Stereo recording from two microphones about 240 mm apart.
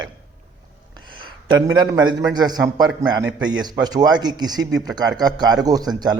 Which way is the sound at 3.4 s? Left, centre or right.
Centre.